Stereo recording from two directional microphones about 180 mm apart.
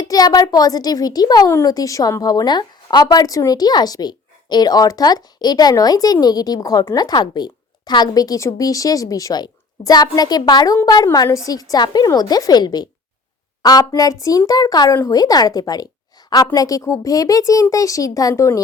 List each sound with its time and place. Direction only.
0.0 s a woman's voice: 20° left (ahead or behind)